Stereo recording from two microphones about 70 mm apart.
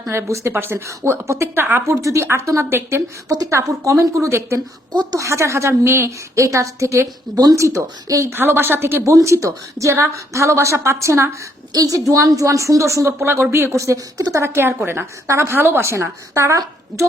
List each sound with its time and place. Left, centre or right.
0.1 s a woman's voice: right
0.5 s a woman's voice: right
2.0 s a woman's voice: right
3.2 s a woman's voice: right
8.3 s a woman's voice: right
9.1 s a woman's voice: right
11.7 s a woman's voice: right
14.4 s a woman's voice: right